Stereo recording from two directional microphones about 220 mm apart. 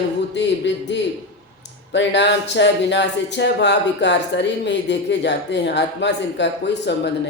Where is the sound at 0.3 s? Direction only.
55° left (ahead or behind).